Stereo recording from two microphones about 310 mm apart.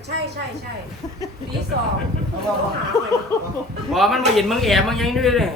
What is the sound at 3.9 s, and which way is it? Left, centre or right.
A man's voice, centre.